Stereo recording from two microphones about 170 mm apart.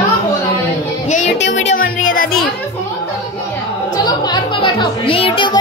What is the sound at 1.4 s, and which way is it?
Music, 90° left.